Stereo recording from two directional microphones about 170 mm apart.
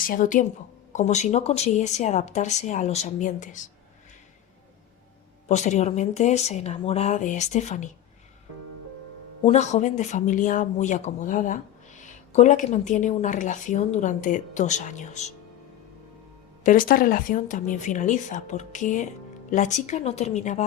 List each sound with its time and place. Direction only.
0.0 s speech: 55° left (ahead or behind)
5.5 s speech: 45° left (ahead or behind)
9.4 s speech: 40° left (ahead or behind)
16.6 s speech: 55° left (ahead or behind)